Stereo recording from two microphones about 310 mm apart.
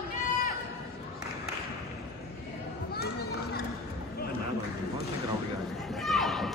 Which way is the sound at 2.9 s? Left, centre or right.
Left.